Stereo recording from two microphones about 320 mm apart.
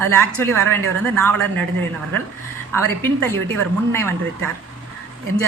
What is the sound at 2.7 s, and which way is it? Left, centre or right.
A woman's voice, centre.